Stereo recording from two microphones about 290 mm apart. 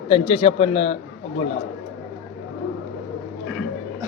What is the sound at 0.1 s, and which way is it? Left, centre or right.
Speech, centre.